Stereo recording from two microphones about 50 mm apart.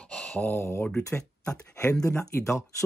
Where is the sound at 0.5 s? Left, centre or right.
Left.